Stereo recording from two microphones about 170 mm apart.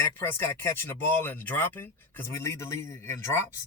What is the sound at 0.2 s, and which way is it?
Speech, 15° left (ahead or behind).